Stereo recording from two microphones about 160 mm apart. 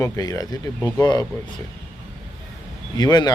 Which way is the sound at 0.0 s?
20° left (ahead or behind).